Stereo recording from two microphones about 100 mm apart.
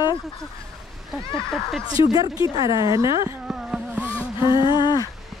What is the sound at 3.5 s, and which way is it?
Vehicle, 5° right (ahead or behind).